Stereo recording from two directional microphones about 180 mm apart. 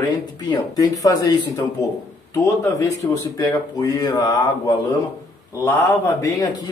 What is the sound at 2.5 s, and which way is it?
Speech, 15° left (ahead or behind).